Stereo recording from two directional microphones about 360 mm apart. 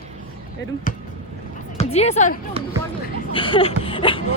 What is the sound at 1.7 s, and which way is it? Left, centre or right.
A woman's voice, centre.